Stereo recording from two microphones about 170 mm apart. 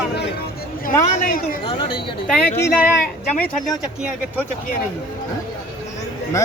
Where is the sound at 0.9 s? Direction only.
50° left (ahead or behind).